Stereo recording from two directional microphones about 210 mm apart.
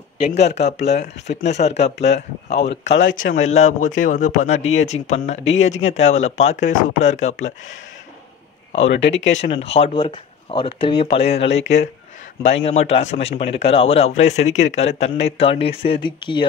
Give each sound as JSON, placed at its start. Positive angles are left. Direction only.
{"t": 0.5, "sound": "speech", "side_deg": 30}
{"t": 2.9, "sound": "speech", "side_deg": 60}
{"t": 3.3, "sound": "speech", "side_deg": 35}
{"t": 9.1, "sound": "speech", "side_deg": 60}
{"t": 9.4, "sound": "a man's voice", "side_deg": 30}